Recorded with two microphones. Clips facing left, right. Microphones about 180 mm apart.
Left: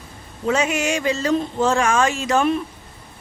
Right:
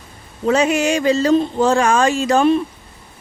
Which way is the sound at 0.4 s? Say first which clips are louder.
Right 5 dB; 35° right (ahead or behind).